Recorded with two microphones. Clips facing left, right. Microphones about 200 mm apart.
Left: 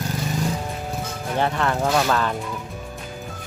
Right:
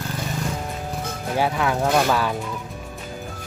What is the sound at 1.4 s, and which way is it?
Speech, 5° right (ahead or behind).